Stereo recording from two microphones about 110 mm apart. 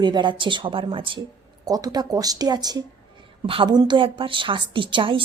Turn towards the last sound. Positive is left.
turn(degrees=-50)  # may be behind; listen again after turning